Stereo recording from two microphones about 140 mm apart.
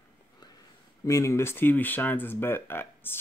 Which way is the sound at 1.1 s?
20° left (ahead or behind).